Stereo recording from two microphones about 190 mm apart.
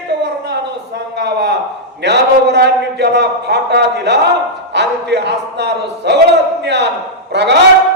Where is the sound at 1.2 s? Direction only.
65° right (ahead or behind).